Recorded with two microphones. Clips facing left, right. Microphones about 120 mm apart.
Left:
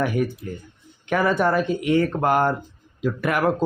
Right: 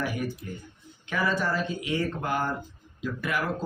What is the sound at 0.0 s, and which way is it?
Speech, 55° left (ahead or behind).